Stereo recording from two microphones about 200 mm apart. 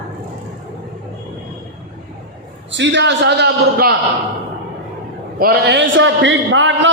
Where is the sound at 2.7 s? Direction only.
65° right (ahead or behind).